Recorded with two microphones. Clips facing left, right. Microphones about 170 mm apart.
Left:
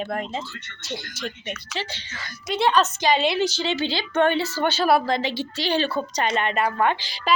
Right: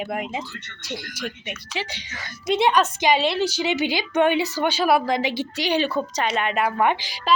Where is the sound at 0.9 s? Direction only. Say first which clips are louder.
Even; 25° left (ahead or behind).